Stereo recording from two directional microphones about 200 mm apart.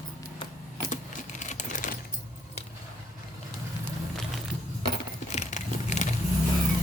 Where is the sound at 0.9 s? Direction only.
40° left (ahead or behind).